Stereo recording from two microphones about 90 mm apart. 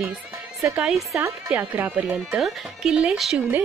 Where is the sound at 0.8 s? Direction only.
Centre (ahead or behind).